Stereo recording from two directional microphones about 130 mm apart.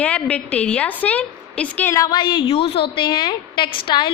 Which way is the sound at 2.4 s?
50° left (ahead or behind).